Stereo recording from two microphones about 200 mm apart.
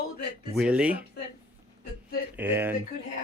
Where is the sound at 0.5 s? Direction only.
5° right (ahead or behind).